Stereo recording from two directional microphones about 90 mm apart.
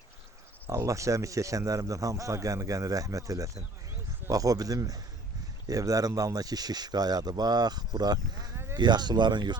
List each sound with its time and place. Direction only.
0.7 s speech: 35° right (ahead or behind); by 9.6 s 55° right (ahead or behind)